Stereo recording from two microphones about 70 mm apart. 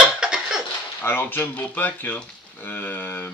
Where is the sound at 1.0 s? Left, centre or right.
Left.